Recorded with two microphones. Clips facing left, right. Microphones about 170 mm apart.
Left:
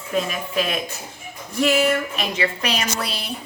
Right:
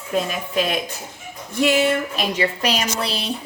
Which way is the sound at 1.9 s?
35° right (ahead or behind).